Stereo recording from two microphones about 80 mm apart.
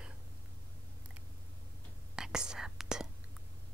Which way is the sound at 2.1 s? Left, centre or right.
Centre.